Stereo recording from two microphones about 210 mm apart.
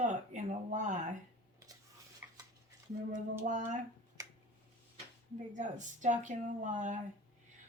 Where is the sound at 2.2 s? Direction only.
10° right (ahead or behind).